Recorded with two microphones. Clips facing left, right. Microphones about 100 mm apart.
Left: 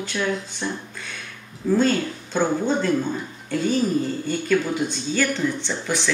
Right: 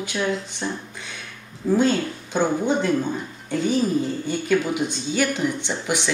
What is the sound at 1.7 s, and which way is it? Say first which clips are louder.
Speech: even; 15° right (ahead or behind).